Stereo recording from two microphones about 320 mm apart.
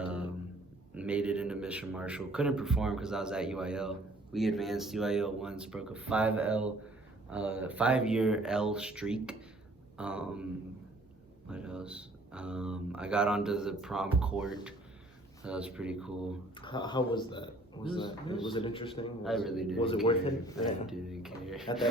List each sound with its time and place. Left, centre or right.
0.0 s a sound: centre
0.9 s a man's voice: centre
11.4 s a man's voice: centre
16.6 s speech: centre
19.2 s a man's voice: centre
20.8 s a man's voice: centre